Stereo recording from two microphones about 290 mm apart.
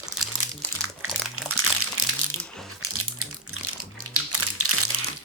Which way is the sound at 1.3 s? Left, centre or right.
Right.